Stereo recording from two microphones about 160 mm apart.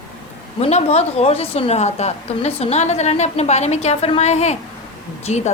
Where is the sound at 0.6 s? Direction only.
40° left (ahead or behind).